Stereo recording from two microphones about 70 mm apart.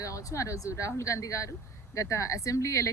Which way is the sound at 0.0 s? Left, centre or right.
Left.